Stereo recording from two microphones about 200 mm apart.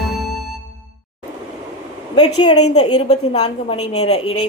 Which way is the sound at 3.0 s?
35° left (ahead or behind).